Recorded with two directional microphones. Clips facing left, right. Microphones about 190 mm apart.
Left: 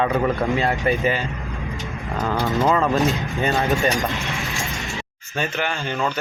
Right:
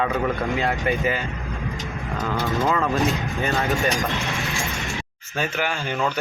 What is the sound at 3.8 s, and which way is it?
Speech, centre (ahead or behind).